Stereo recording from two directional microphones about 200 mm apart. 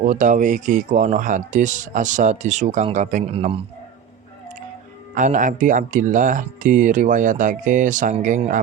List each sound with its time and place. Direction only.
0.0 s speech: 40° right (ahead or behind)
5.1 s speech: 40° right (ahead or behind)